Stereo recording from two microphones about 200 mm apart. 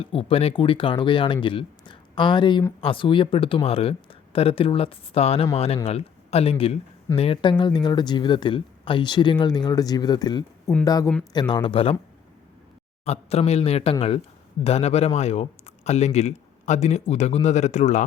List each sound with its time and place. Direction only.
0.0 s speech: 25° left (ahead or behind)
13.1 s speech: 30° left (ahead or behind)